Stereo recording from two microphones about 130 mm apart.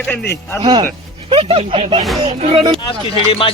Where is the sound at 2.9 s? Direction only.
40° left (ahead or behind).